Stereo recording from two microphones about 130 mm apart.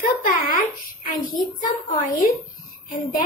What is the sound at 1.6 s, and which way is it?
Speech, 90° left.